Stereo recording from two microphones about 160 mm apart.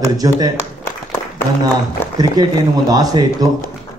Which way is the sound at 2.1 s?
25° right (ahead or behind).